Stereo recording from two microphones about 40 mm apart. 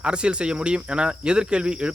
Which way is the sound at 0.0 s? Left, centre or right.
Right.